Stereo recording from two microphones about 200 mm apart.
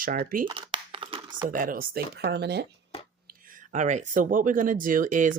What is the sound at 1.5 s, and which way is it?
Speech, 45° right (ahead or behind).